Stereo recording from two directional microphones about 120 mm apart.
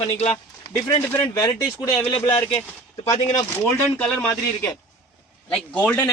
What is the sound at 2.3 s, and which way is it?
Speech, 45° left (ahead or behind).